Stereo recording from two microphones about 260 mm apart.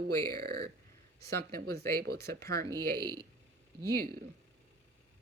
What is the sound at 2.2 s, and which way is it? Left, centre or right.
Speech, centre.